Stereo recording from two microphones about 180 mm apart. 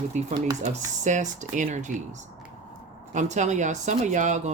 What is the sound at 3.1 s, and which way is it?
Speech, 40° right (ahead or behind).